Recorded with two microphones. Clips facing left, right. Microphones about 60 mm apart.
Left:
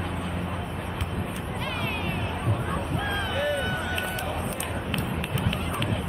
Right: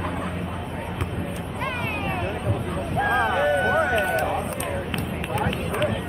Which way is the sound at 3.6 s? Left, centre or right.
Right.